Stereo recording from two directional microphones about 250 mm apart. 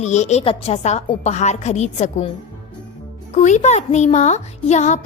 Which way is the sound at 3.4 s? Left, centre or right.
Left.